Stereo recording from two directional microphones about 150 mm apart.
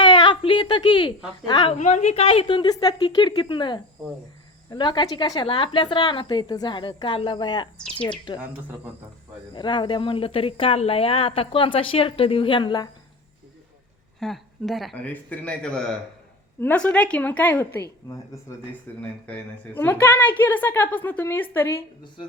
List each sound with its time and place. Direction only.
0.0 s a woman's voice: 35° left (ahead or behind)
9.5 s a woman's voice: 30° left (ahead or behind)
14.2 s speech: centre (ahead or behind)
14.9 s a woman's voice: 10° left (ahead or behind)